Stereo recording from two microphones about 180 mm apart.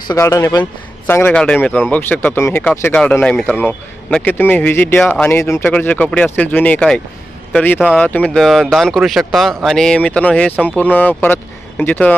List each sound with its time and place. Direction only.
0.1 s speech: 20° left (ahead or behind)
7.8 s speech: 5° right (ahead or behind)
8.0 s speech: 10° left (ahead or behind)